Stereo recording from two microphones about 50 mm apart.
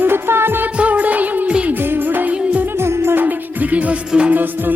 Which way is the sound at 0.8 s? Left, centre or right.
Right.